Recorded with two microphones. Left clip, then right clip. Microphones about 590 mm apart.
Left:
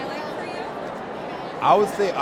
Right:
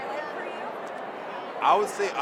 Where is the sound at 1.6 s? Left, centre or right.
Left.